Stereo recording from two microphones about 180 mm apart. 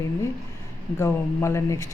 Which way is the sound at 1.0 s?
15° left (ahead or behind).